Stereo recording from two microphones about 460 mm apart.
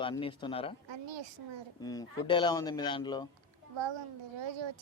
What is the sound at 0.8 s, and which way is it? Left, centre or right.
Speech, right.